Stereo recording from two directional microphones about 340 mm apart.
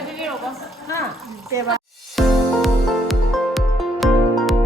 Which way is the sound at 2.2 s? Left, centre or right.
Centre.